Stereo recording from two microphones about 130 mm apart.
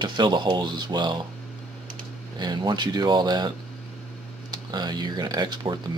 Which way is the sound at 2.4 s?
35° right (ahead or behind).